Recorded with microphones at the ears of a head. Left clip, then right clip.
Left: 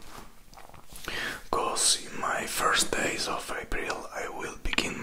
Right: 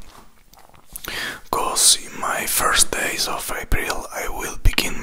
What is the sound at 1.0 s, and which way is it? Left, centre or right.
Speech, right.